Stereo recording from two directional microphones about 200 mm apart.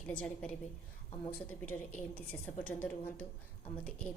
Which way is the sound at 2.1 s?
10° left (ahead or behind).